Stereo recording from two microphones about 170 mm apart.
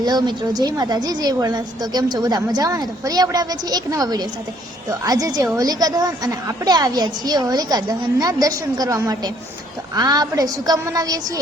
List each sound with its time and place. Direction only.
0.0 s a woman's voice: 25° right (ahead or behind)